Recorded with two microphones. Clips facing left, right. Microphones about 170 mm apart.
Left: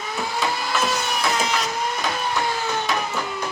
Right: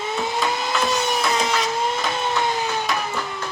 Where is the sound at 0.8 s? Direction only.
Centre (ahead or behind).